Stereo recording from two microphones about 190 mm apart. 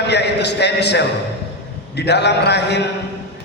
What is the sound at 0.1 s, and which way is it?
A man's voice, 60° left (ahead or behind).